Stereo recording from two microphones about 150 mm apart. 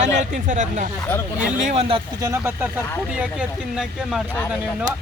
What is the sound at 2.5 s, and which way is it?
Speech, 10° right (ahead or behind).